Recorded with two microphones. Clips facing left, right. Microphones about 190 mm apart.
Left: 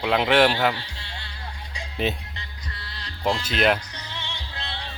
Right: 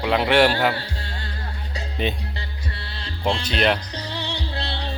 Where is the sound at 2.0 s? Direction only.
5° left (ahead or behind).